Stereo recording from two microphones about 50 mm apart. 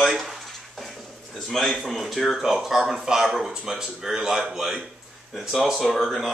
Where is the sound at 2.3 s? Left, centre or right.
Centre.